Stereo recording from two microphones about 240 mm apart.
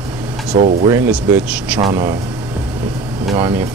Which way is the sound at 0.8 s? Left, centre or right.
Centre.